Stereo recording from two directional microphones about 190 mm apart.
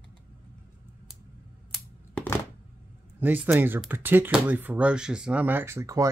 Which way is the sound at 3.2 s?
10° right (ahead or behind).